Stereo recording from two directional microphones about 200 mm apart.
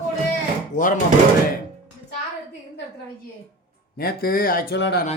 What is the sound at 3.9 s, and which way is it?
A man's voice, 50° left (ahead or behind).